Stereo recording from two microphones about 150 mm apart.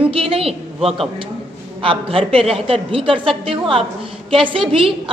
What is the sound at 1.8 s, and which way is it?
A woman's voice, 35° right (ahead or behind).